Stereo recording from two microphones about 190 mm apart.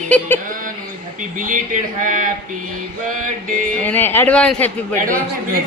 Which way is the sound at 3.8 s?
10° left (ahead or behind).